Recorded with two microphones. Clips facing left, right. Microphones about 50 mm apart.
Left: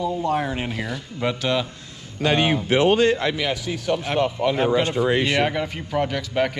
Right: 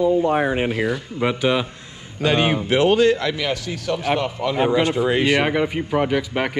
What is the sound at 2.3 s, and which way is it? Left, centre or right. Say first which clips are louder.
Speech: right 1 dB; right.